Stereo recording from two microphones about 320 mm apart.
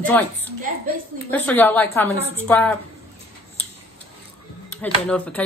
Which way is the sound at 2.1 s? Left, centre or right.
Centre.